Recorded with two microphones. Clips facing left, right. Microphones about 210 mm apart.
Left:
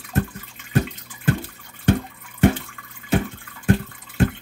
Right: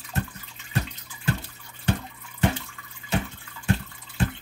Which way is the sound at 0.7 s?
45° left (ahead or behind).